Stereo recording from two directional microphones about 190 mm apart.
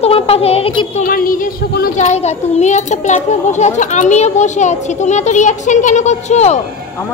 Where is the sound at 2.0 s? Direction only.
35° left (ahead or behind).